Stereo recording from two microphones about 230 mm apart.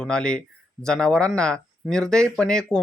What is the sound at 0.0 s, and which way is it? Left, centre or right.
Speech, centre.